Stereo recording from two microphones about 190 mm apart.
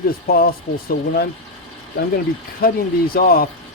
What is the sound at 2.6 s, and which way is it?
Speech, 55° left (ahead or behind).